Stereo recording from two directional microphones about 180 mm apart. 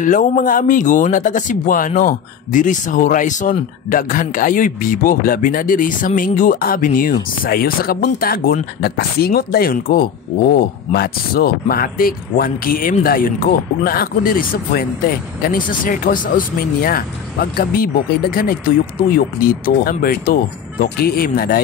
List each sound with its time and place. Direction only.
0.0 s speech: 45° left (ahead or behind)